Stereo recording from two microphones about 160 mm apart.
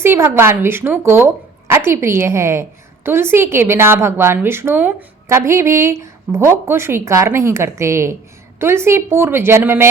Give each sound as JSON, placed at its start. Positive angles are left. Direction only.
{"t": 0.0, "sound": "a woman's voice", "side_deg": -15}